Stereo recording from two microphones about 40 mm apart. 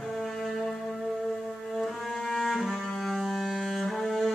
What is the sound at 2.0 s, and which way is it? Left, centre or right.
Cello, centre.